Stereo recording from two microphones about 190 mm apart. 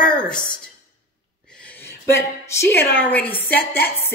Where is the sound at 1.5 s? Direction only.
5° left (ahead or behind).